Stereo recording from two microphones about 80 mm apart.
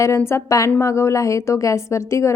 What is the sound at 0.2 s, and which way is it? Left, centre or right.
A woman's voice, left.